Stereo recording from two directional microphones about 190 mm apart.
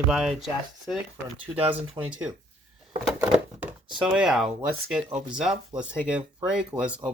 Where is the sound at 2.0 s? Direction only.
5° right (ahead or behind).